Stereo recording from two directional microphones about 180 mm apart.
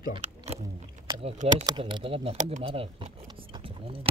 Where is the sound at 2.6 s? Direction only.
30° right (ahead or behind).